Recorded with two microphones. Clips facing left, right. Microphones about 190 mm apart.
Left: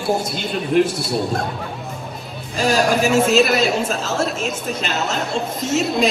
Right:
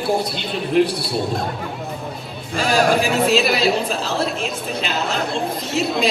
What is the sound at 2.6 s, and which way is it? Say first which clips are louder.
Speech: even; 45° left (ahead or behind).